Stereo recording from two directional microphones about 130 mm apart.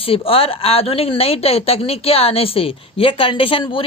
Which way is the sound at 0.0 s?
45° left (ahead or behind).